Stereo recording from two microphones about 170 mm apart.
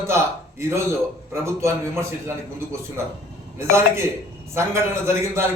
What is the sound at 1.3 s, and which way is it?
A man's voice, 15° right (ahead or behind).